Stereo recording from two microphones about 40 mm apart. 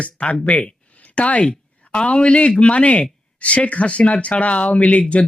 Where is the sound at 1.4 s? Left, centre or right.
Left.